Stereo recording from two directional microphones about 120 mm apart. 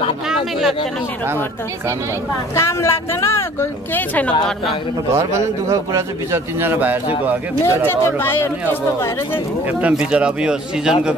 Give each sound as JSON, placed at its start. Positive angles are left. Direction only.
{"t": 0.3, "sound": "speech", "side_deg": 0}
{"t": 2.5, "sound": "speech", "side_deg": 20}
{"t": 5.1, "sound": "a man's voice", "side_deg": -25}
{"t": 7.6, "sound": "speech", "side_deg": 20}
{"t": 9.7, "sound": "speech", "side_deg": -10}